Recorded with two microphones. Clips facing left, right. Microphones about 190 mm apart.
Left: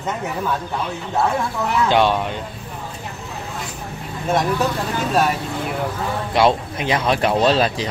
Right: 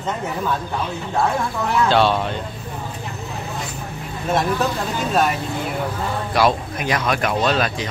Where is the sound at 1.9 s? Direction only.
15° left (ahead or behind).